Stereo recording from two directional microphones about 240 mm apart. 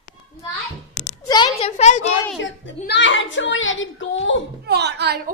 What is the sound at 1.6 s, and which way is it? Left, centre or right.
Speech, left.